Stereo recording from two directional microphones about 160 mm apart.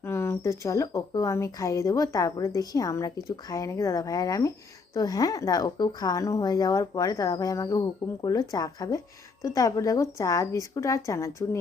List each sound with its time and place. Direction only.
0.0 s speech: 15° left (ahead or behind)